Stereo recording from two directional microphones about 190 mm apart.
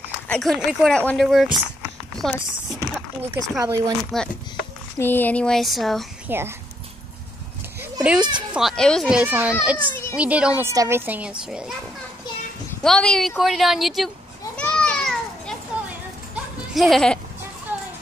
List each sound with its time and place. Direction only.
0.3 s speech: centre (ahead or behind)
2.9 s a child's voice: 15° right (ahead or behind)
4.1 s speech: centre (ahead or behind)
6.2 s speech: 10° right (ahead or behind)
8.0 s a child's voice: 5° right (ahead or behind)
12.8 s speech: 5° left (ahead or behind)
14.6 s children playing: 5° left (ahead or behind)
15.7 s a sound: 5° right (ahead or behind)
16.7 s speech: centre (ahead or behind)